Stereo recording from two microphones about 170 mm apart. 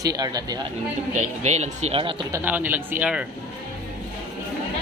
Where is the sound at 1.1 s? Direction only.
45° right (ahead or behind).